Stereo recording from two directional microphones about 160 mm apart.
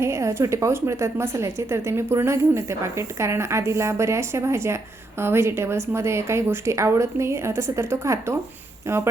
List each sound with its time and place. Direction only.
0.0 s a woman's voice: 20° right (ahead or behind)